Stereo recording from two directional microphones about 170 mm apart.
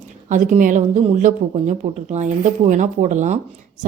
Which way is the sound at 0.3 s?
50° right (ahead or behind).